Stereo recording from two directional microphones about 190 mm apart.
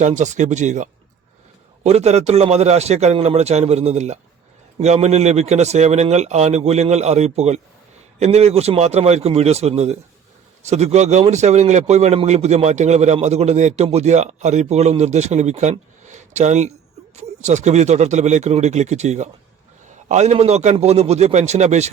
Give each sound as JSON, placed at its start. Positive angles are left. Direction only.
{"t": 0.0, "sound": "speech", "side_deg": -40}
{"t": 16.0, "sound": "a sound", "side_deg": -40}
{"t": 17.2, "sound": "speech", "side_deg": -40}